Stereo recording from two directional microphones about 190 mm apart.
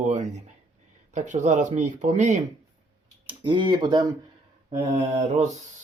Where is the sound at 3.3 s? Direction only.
25° right (ahead or behind).